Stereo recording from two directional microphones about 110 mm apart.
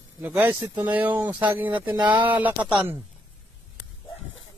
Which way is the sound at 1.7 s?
45° right (ahead or behind).